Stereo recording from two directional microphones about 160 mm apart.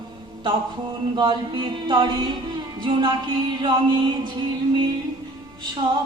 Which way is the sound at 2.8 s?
30° right (ahead or behind).